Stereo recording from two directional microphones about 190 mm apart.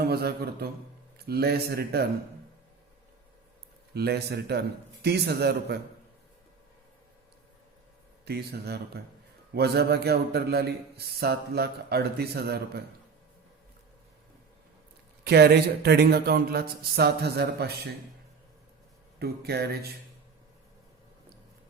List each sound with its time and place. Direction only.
0.0 s a man's voice: 55° right (ahead or behind)
3.9 s a man's voice: 55° right (ahead or behind)
8.2 s a man's voice: 60° right (ahead or behind)
15.2 s a man's voice: 60° right (ahead or behind)
19.2 s a man's voice: 55° right (ahead or behind)